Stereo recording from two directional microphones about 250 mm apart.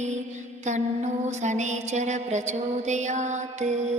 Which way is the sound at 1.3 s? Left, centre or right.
Right.